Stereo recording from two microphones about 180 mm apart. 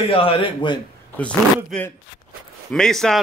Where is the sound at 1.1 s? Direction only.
10° left (ahead or behind).